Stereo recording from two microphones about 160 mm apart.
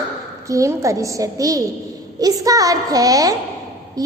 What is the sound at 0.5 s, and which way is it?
A child's voice, 20° right (ahead or behind).